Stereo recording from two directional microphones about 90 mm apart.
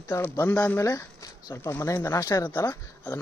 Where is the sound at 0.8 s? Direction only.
35° left (ahead or behind).